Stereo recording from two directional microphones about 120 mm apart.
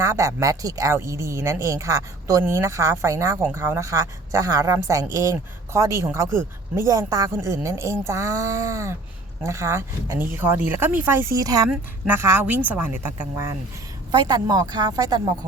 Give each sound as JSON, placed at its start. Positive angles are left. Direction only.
{"t": 0.0, "sound": "speech", "side_deg": -25}
{"t": 11.3, "sound": "speech", "side_deg": -30}
{"t": 11.7, "sound": "a woman's voice", "side_deg": -15}
{"t": 14.1, "sound": "speech", "side_deg": -35}